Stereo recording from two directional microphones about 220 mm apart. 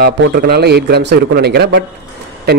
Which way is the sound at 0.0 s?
45° right (ahead or behind).